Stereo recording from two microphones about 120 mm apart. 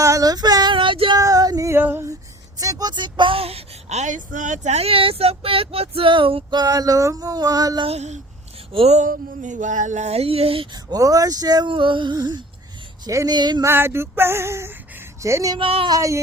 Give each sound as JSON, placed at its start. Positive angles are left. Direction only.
{"t": 0.0, "sound": "female singing", "side_deg": -30}
{"t": 1.2, "sound": "female singing", "side_deg": -30}
{"t": 2.6, "sound": "speech", "side_deg": -30}
{"t": 7.8, "sound": "speech", "side_deg": -60}
{"t": 8.7, "sound": "speech", "side_deg": -50}
{"t": 9.0, "sound": "speech", "side_deg": -90}
{"t": 10.8, "sound": "a sound", "side_deg": -30}
{"t": 13.7, "sound": "male singing", "side_deg": -20}
{"t": 15.5, "sound": "speech", "side_deg": -50}
{"t": 15.9, "sound": "male singing", "side_deg": -25}